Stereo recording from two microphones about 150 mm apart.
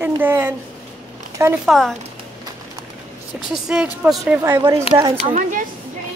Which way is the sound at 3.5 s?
5° right (ahead or behind).